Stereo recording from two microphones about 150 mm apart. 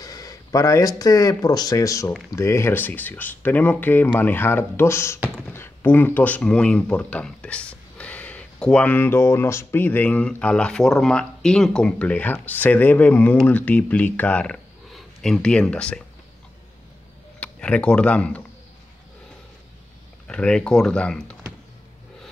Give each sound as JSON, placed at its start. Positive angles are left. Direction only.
{"t": 0.0, "sound": "speech", "side_deg": 25}
{"t": 17.4, "sound": "speech", "side_deg": 10}
{"t": 20.2, "sound": "speech", "side_deg": 5}